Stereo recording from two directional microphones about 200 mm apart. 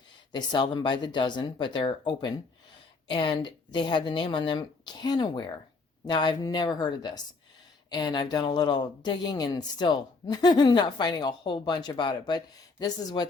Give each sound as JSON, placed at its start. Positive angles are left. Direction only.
{"t": 0.3, "sound": "speech", "side_deg": 20}